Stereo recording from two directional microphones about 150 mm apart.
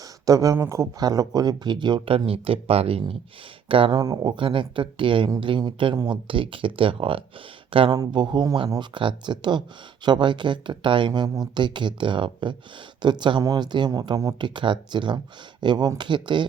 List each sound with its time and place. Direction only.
0.3 s speech: 20° right (ahead or behind)
4.0 s speech: 25° right (ahead or behind)